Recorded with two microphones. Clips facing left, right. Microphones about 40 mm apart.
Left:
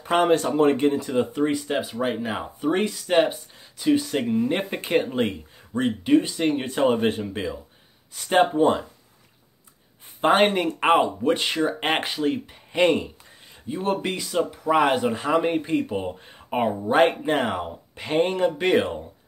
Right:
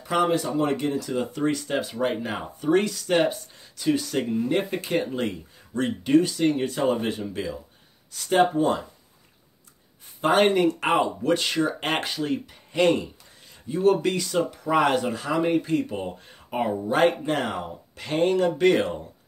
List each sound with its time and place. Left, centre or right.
0.0 s speech: left
1.3 s speech: centre
2.7 s speech: left
5.8 s speech: centre
6.3 s speech: left
10.2 s speech: left
14.2 s speech: centre
15.1 s speech: left